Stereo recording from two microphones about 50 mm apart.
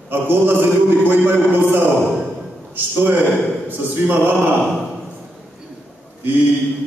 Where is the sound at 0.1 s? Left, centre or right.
Right.